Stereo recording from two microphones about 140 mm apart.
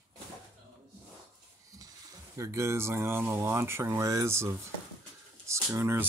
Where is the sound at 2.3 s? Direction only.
20° right (ahead or behind).